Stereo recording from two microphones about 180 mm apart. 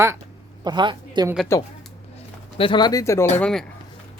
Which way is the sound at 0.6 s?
25° right (ahead or behind).